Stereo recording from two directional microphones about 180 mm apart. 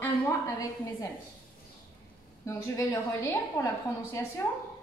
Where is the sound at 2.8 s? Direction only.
15° left (ahead or behind).